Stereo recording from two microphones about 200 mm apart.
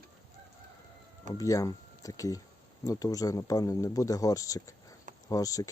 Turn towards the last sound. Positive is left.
turn(degrees=15)  # may be behind; listen again after turning